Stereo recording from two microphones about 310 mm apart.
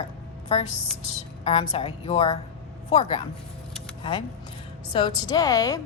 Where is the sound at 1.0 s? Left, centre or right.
Left.